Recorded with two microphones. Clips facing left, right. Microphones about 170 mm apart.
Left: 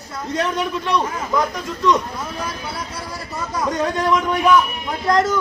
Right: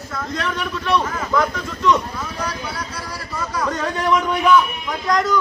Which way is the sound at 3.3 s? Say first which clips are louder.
Left 1 dB; 20° left (ahead or behind).